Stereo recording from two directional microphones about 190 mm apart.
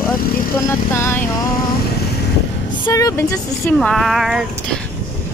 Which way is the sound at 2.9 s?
15° left (ahead or behind).